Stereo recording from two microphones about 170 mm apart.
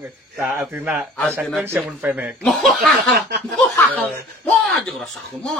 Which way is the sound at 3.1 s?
70° right (ahead or behind).